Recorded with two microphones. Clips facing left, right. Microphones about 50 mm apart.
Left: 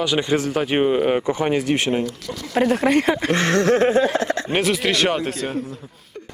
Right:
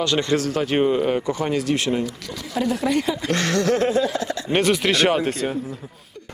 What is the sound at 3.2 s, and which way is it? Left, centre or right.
Speech, left.